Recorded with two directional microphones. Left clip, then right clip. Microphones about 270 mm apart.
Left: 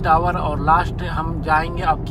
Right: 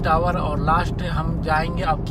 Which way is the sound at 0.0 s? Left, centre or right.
Centre.